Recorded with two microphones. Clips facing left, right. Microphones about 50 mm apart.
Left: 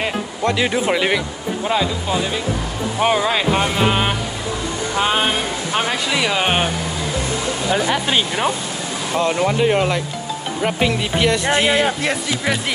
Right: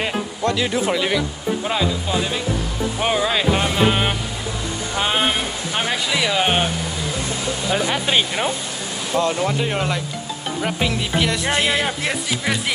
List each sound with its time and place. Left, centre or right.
0.4 s speech: left
3.0 s speech: centre
5.9 s speech: centre
9.1 s speech: left
9.7 s speech: centre